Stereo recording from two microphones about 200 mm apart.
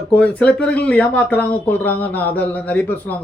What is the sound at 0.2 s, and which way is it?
Speech, 5° left (ahead or behind).